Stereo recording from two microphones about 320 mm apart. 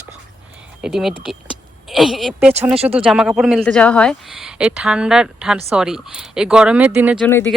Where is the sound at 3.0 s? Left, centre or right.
Centre.